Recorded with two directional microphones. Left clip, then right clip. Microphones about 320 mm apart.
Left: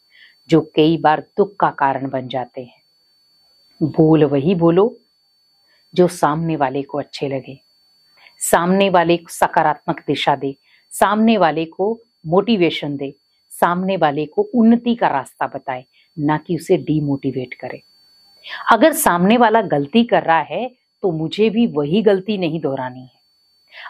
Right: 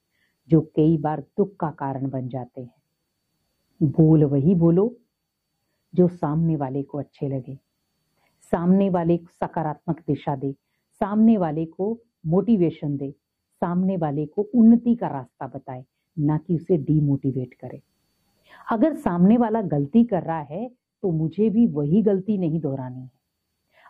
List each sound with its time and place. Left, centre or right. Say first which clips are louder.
0.5 s a woman's voice: left 6 dB; centre
3.8 s speech: left 6 dB; centre
4.1 s a woman's voice: left 6 dB; centre
5.9 s a woman's voice: left 7 dB; centre
11.7 s speech: left 7 dB; centre
12.4 s a woman's voice: left 6 dB; centre
14.3 s speech: left 4 dB; left
14.7 s a woman's voice: left 6 dB; centre
21.3 s a woman's voice: left 4 dB; centre